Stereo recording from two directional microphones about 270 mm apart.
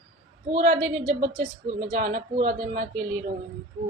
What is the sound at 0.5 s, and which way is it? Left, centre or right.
A woman's voice, right.